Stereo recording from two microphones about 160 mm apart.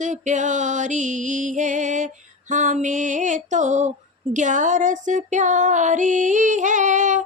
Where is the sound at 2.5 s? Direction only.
50° right (ahead or behind).